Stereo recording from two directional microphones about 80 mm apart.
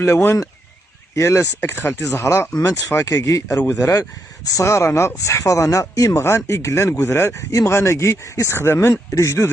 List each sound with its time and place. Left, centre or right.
0.0 s speech: left
2.5 s speech: left
6.2 s speech: left